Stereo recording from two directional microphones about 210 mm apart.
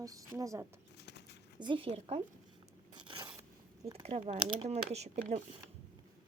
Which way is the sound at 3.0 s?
20° right (ahead or behind).